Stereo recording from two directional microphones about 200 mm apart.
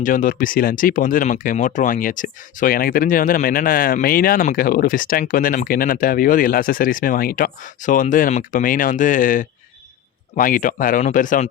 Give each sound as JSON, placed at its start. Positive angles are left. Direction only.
{"t": 0.0, "sound": "speech", "side_deg": 40}